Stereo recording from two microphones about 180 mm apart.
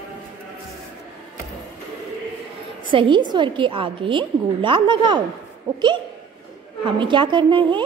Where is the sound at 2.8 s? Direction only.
25° right (ahead or behind).